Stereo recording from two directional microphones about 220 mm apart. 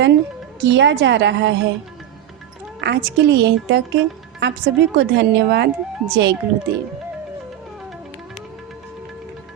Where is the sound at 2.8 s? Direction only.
50° right (ahead or behind).